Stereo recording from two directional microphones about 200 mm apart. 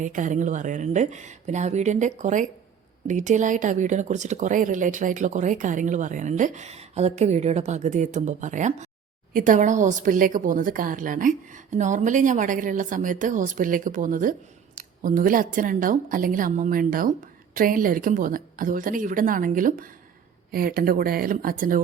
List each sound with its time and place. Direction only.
0.0 s speech: 40° right (ahead or behind)